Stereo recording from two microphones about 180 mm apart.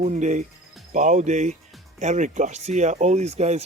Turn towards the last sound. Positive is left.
turn(degrees=-35)  # may be behind; listen again after turning